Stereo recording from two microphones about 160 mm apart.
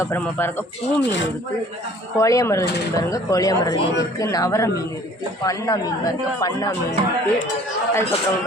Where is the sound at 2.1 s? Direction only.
20° left (ahead or behind).